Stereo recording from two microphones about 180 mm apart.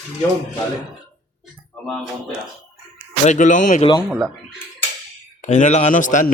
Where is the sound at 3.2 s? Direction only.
45° left (ahead or behind).